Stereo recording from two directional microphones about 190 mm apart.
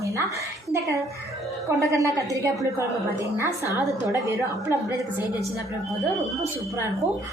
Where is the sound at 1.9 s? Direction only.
15° right (ahead or behind).